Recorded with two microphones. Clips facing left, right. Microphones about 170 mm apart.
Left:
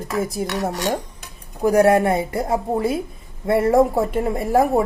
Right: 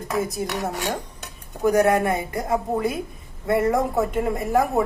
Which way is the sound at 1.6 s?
30° left (ahead or behind).